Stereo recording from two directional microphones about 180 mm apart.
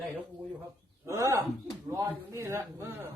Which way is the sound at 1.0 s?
15° right (ahead or behind).